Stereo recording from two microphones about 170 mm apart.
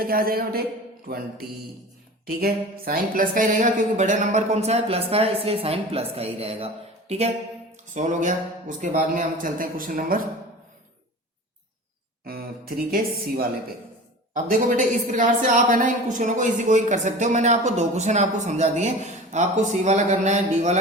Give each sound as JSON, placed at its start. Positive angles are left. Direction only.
{"t": 0.0, "sound": "a woman's voice", "side_deg": -60}
{"t": 12.2, "sound": "a woman's voice", "side_deg": -60}
{"t": 14.3, "sound": "a woman's voice", "side_deg": -50}